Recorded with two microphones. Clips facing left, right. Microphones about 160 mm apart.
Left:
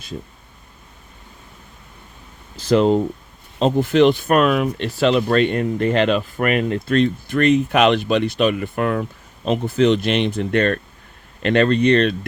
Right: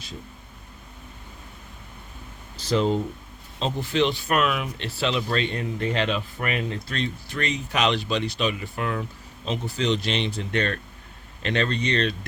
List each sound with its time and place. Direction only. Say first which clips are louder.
2.6 s speech: left 7 dB; 65° left (ahead or behind)
3.6 s speech: left 9 dB; 50° left (ahead or behind)